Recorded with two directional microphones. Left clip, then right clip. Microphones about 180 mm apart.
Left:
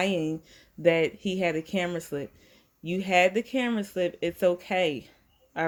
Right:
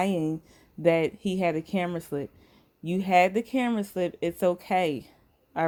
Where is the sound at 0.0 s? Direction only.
45° right (ahead or behind).